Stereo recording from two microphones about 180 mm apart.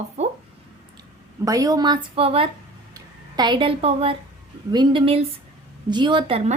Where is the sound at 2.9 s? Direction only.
25° right (ahead or behind).